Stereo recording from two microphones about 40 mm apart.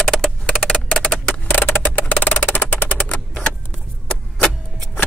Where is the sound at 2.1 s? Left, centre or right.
Left.